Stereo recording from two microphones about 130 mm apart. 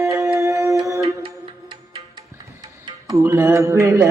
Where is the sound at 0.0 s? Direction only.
25° right (ahead or behind).